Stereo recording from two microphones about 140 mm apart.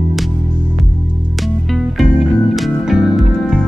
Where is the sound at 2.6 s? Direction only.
Centre (ahead or behind).